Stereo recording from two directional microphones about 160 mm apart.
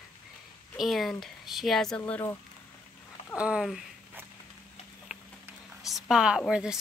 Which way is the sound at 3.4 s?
5° right (ahead or behind).